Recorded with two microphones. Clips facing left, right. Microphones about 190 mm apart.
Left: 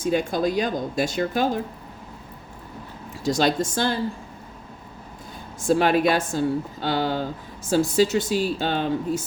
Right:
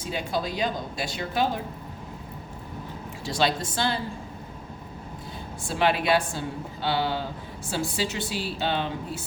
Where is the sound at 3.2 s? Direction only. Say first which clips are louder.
Left 5 dB; 45° left (ahead or behind).